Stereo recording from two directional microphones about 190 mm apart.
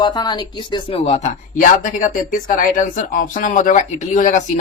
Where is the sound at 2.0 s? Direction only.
45° left (ahead or behind).